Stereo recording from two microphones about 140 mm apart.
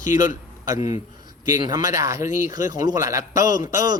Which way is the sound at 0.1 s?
20° right (ahead or behind).